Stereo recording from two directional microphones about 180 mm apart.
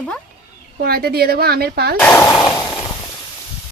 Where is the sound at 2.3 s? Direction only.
20° left (ahead or behind).